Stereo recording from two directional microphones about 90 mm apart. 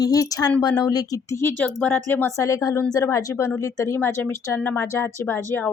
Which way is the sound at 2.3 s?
35° left (ahead or behind).